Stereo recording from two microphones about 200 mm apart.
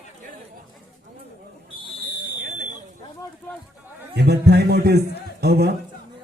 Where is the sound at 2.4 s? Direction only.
45° right (ahead or behind).